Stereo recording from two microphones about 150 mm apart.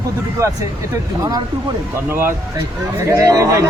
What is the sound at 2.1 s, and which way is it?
Speech, 15° right (ahead or behind).